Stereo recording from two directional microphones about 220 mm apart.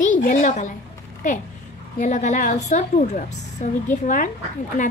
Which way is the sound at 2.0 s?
35° left (ahead or behind).